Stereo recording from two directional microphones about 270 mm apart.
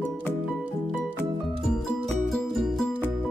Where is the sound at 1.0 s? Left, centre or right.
Centre.